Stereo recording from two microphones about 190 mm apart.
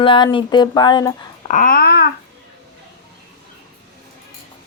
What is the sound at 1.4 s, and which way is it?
Babbling, 45° left (ahead or behind).